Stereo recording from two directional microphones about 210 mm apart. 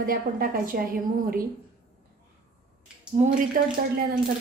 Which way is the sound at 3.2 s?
30° right (ahead or behind).